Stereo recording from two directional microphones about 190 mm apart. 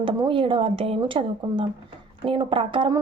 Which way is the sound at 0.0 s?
25° right (ahead or behind).